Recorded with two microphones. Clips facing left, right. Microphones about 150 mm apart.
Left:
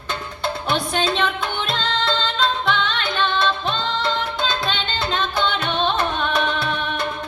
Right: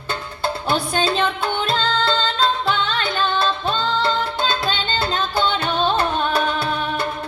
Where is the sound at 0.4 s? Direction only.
30° right (ahead or behind).